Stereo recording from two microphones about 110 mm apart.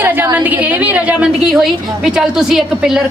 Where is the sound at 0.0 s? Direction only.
15° right (ahead or behind).